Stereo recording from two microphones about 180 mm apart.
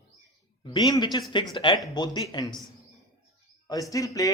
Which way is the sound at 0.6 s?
25° left (ahead or behind).